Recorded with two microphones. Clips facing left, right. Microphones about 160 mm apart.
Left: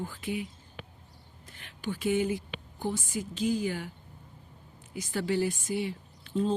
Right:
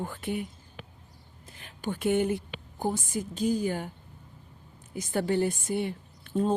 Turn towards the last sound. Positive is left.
turn(degrees=-50)  # may be behind; listen again after turning